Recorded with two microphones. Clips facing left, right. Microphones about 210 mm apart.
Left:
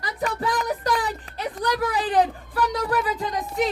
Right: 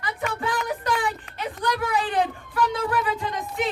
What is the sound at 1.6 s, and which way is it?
Music, 35° left (ahead or behind).